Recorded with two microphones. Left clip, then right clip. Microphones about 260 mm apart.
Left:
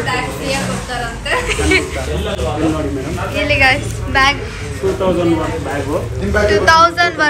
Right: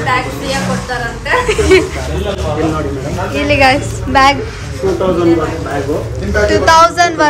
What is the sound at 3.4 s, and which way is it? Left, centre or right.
Music, centre.